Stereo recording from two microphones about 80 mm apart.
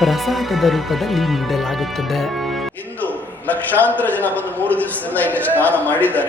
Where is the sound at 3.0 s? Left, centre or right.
Left.